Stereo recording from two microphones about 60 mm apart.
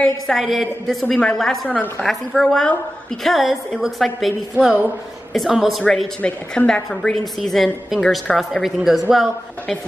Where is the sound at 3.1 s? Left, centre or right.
Centre.